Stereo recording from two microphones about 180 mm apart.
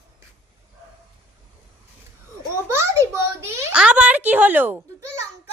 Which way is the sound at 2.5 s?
15° right (ahead or behind).